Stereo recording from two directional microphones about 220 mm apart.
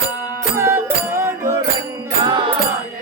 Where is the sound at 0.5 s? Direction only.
10° right (ahead or behind).